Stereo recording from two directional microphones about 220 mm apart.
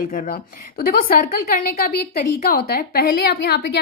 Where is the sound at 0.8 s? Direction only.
40° left (ahead or behind).